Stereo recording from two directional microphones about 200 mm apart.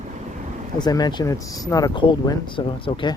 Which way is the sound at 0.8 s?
20° left (ahead or behind).